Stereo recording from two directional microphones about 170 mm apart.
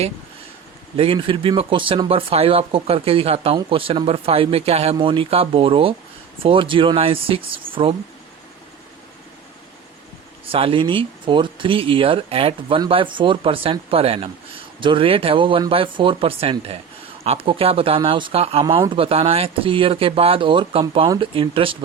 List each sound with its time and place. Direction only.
0.9 s speech: 30° right (ahead or behind)
10.4 s speech: 35° right (ahead or behind)